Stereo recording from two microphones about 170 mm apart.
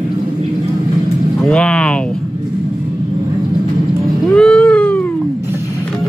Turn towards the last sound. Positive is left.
turn(degrees=5)  # may be behind; listen again after turning